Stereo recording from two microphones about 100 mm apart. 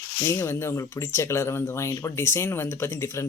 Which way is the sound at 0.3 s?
25° left (ahead or behind).